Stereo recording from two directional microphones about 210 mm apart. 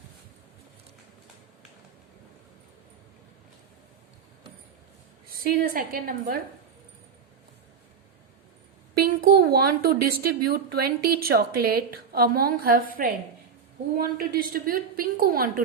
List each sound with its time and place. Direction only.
5.4 s speech: 45° right (ahead or behind)
9.0 s speech: 45° right (ahead or behind)
13.9 s speech: 45° right (ahead or behind)